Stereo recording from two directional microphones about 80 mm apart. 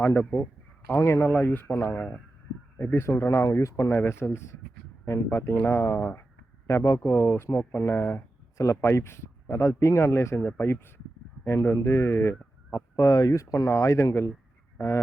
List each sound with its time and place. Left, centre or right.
0.0 s speech: left
2.9 s speech: left
3.9 s speech: left
6.7 s speech: left
8.7 s speech: left
12.7 s speech: left